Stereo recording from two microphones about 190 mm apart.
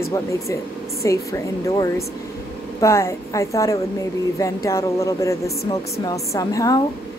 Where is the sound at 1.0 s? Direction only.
15° left (ahead or behind).